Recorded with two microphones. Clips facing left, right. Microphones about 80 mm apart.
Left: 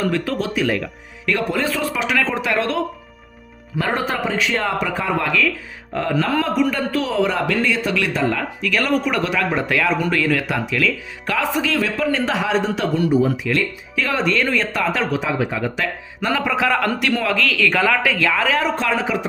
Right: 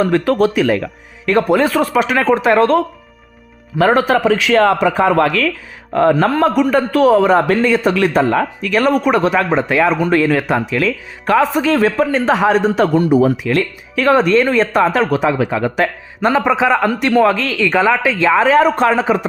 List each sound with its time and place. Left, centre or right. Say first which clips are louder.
0.0 s speech: right 8 dB; right
1.5 s a man's voice: right 8 dB; right
3.8 s a man's voice: right 9 dB; right
5.9 s speech: right 7 dB; right
9.6 s speech: right 5 dB; right
13.1 s speech: right 5 dB; right
16.2 s speech: right 6 dB; right
17.0 s speech: right 7 dB; right